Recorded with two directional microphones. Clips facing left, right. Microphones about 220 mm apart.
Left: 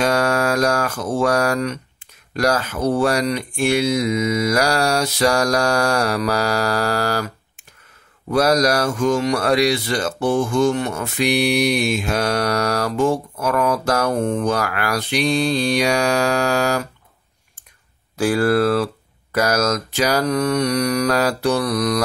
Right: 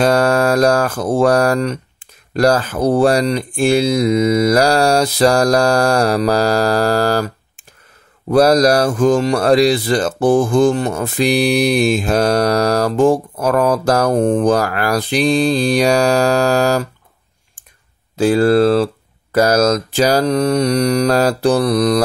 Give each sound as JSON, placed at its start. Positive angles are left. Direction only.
{"t": 0.0, "sound": "speech", "side_deg": -30}
{"t": 18.1, "sound": "speech", "side_deg": -25}